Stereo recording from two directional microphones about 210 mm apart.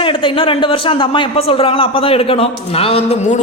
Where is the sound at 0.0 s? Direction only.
25° left (ahead or behind).